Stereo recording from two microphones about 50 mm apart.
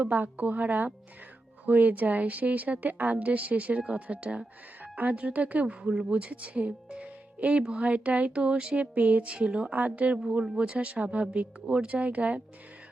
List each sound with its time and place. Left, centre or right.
0.0 s a woman's voice: right
4.8 s speech: right